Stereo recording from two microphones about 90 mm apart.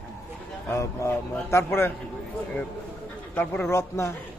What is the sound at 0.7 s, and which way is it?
A man's voice, 35° left (ahead or behind).